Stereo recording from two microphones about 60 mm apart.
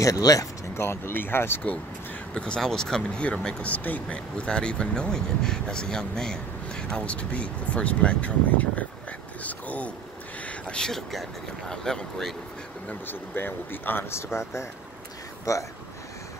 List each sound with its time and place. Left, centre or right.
0.0 s speech: left
0.7 s speech: left
2.3 s speech: centre
10.7 s speech: centre
13.0 s speech: left
15.5 s speech: left